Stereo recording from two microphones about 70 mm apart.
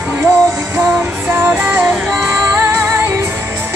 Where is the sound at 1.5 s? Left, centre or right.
Centre.